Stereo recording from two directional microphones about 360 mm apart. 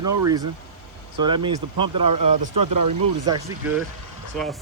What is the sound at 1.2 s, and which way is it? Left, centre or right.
Speech, centre.